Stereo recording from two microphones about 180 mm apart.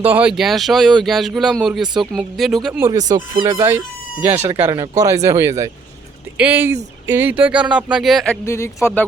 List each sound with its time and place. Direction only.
0.0 s speech: 10° right (ahead or behind)
3.1 s speech: 25° right (ahead or behind); by 8.4 s centre (ahead or behind)
8.4 s speech: 15° left (ahead or behind)